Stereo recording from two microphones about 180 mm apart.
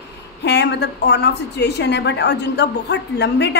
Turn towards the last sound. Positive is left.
turn(degrees=70)  # may be behind; listen again after turning